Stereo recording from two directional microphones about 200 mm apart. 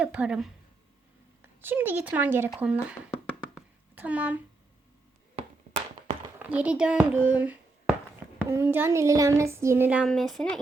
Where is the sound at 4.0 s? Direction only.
10° right (ahead or behind).